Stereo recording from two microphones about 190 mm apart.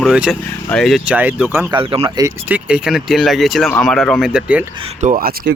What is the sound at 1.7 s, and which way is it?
Speech, 30° right (ahead or behind).